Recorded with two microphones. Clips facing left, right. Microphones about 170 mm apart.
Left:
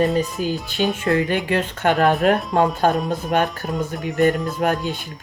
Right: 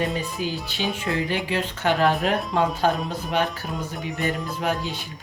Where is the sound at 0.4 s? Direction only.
45° left (ahead or behind).